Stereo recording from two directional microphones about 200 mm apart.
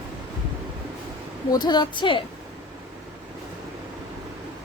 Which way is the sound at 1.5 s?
20° left (ahead or behind).